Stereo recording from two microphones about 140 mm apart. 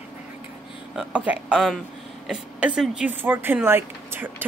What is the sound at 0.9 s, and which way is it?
Speech, 10° right (ahead or behind).